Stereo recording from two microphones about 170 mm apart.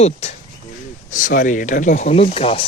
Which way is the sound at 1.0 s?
50° left (ahead or behind).